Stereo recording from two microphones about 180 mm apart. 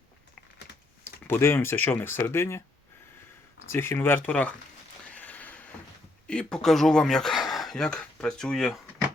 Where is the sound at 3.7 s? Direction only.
15° left (ahead or behind).